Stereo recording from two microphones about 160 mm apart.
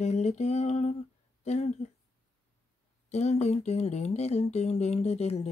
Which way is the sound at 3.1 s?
45° left (ahead or behind).